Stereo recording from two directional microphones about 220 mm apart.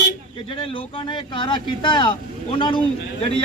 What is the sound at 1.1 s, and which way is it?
Speech, 20° left (ahead or behind).